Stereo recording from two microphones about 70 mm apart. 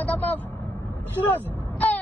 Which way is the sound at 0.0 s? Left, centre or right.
Left.